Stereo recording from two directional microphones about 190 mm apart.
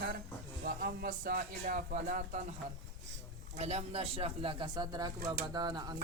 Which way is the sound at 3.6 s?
35° right (ahead or behind).